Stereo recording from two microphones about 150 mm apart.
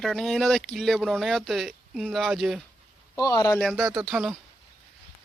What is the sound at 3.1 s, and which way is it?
Speech, 25° left (ahead or behind).